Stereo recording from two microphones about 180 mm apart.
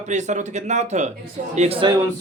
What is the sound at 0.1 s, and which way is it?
Speech, 40° right (ahead or behind).